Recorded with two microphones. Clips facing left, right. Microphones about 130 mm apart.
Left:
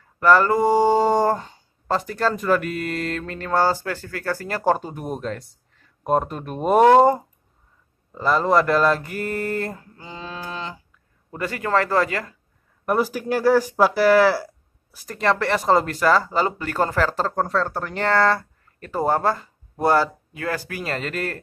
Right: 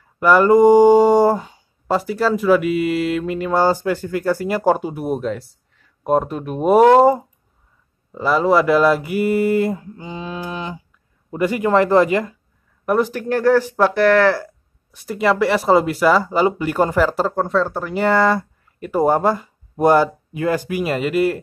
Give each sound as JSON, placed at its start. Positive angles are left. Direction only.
{"t": 0.2, "sound": "speech", "side_deg": -15}
{"t": 12.8, "sound": "speech", "side_deg": 5}
{"t": 15.0, "sound": "speech", "side_deg": -10}
{"t": 17.4, "sound": "speech", "side_deg": 0}